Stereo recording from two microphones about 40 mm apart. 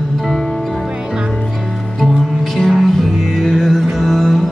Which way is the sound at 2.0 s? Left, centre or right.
Centre.